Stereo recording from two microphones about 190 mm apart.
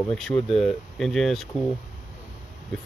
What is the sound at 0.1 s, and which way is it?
Speech, centre (ahead or behind).